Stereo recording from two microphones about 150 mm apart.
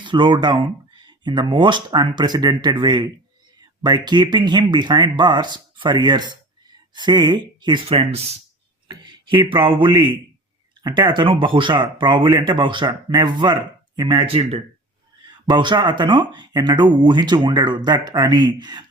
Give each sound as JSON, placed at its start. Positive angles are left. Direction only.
{"t": 0.0, "sound": "a man's voice", "side_deg": -30}
{"t": 15.4, "sound": "speech", "side_deg": -30}